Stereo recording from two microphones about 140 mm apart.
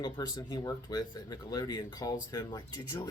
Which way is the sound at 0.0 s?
30° left (ahead or behind).